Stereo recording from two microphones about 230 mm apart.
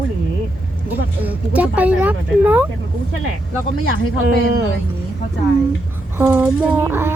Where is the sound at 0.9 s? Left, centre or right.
Centre.